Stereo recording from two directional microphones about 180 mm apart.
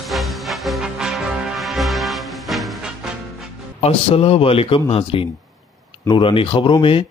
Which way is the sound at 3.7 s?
30° left (ahead or behind).